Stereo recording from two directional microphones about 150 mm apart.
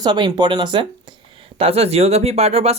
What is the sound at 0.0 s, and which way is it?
Speech, 30° right (ahead or behind).